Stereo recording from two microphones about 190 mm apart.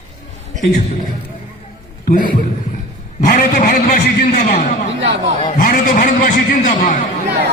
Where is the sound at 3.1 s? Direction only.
45° left (ahead or behind).